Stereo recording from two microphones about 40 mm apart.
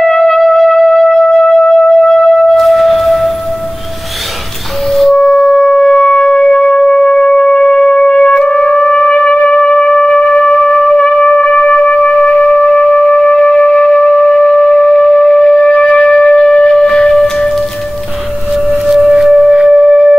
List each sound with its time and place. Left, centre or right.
0.0 s music: centre
4.8 s music: centre
5.7 s music: left
10.0 s music: left
17.1 s music: centre
18.5 s music: centre
19.6 s music: right